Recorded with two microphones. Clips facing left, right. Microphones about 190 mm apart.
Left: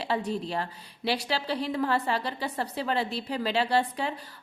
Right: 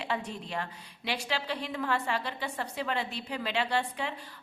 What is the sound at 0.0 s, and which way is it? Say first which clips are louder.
Speech: left 5 dB; 35° left (ahead or behind).